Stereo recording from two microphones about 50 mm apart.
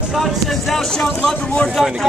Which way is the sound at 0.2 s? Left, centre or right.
Centre.